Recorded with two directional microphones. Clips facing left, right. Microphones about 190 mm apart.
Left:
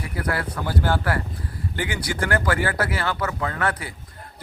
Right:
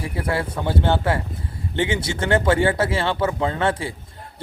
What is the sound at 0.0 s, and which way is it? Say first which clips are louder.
A man's voice: right 3 dB; 25° right (ahead or behind).